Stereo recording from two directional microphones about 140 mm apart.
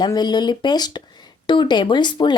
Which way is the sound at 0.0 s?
30° left (ahead or behind).